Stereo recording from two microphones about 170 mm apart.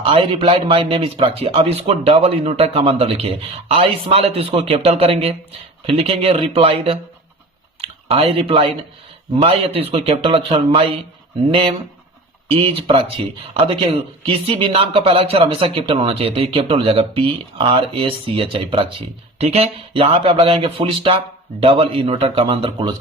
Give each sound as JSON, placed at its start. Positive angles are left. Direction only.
{"t": 0.0, "sound": "a man's voice", "side_deg": -35}
{"t": 12.5, "sound": "a man's voice", "side_deg": -35}